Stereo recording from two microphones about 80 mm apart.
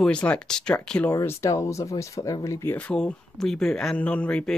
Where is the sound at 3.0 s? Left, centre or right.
Centre.